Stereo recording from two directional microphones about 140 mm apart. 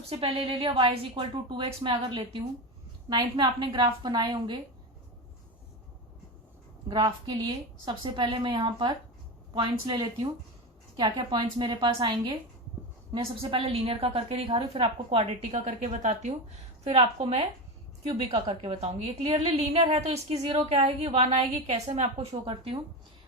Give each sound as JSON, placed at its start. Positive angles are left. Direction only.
{"t": 0.1, "sound": "a woman's voice", "side_deg": -45}
{"t": 6.8, "sound": "a woman's voice", "side_deg": -30}
{"t": 13.4, "sound": "a woman's voice", "side_deg": -45}